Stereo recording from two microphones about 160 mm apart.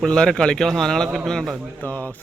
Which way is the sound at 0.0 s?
5° left (ahead or behind).